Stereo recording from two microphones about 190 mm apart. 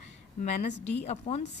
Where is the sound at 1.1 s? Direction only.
35° left (ahead or behind).